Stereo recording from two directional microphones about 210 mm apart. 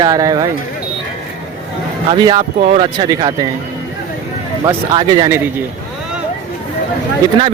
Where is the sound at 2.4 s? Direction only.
40° right (ahead or behind).